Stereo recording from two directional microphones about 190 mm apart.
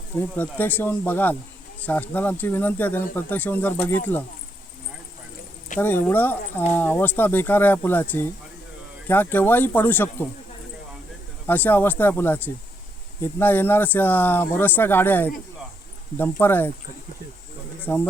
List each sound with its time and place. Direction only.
0.2 s speech: 10° left (ahead or behind)
5.8 s speech: 10° left (ahead or behind)
11.4 s speech: 10° left (ahead or behind)
17.8 s speech: 10° left (ahead or behind)